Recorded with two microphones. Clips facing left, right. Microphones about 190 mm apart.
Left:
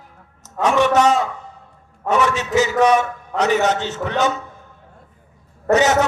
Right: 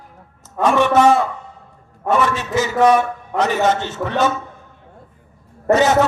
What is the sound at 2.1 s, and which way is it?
A man's voice, 15° left (ahead or behind).